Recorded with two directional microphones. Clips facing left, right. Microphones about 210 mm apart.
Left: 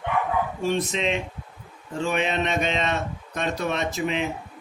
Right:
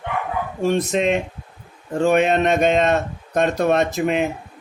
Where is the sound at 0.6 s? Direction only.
50° right (ahead or behind).